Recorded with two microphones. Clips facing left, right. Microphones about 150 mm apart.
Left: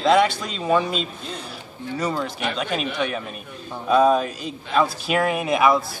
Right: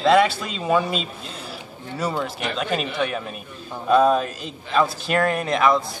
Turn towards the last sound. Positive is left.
turn(degrees=5)  # may be behind; listen again after turning